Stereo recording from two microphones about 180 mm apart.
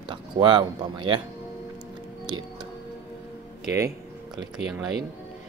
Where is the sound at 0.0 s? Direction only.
25° right (ahead or behind).